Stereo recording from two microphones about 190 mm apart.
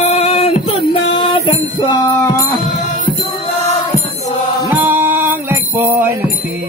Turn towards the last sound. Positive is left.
turn(degrees=-10)  # may be behind; listen again after turning